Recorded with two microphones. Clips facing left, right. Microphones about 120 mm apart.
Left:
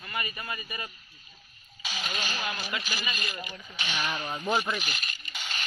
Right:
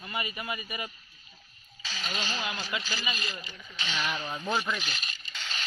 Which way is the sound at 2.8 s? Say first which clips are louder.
Even; 15° left (ahead or behind).